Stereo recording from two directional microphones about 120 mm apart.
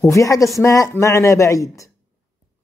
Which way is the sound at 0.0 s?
25° left (ahead or behind).